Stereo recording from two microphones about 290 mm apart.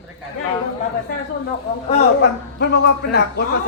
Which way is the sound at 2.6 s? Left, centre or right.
Left.